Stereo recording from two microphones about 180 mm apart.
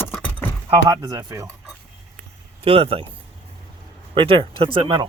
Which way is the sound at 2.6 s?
30° right (ahead or behind).